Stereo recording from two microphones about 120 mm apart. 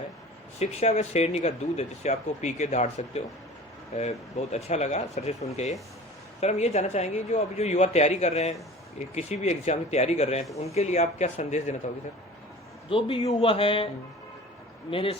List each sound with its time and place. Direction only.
0.6 s speech: 65° left (ahead or behind)
12.9 s a man's voice: 50° left (ahead or behind)
14.8 s a man's voice: 50° left (ahead or behind)